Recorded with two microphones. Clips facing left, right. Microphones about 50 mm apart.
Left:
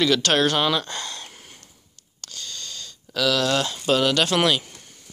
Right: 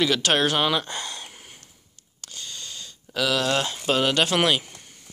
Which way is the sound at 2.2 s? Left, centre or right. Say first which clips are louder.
Left 1 dB; centre.